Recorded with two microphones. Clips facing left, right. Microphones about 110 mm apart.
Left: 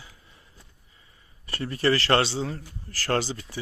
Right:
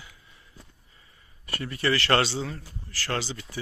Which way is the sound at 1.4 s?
30° left (ahead or behind).